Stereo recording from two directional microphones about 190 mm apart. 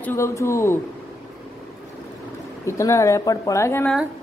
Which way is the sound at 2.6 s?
15° left (ahead or behind).